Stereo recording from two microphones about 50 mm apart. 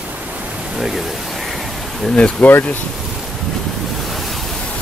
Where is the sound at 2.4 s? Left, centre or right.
Left.